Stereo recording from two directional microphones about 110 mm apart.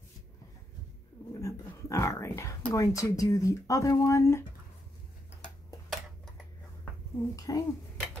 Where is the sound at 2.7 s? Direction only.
30° left (ahead or behind).